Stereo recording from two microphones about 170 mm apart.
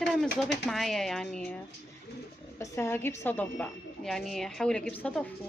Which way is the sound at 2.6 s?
15° left (ahead or behind).